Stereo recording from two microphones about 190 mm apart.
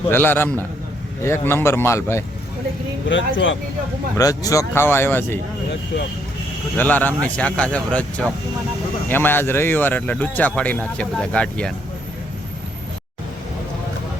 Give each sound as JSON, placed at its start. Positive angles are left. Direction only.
{"t": 0.1, "sound": "speech", "side_deg": 10}
{"t": 3.1, "sound": "speech", "side_deg": 85}
{"t": 4.2, "sound": "speech", "side_deg": 20}
{"t": 6.7, "sound": "speech", "side_deg": 10}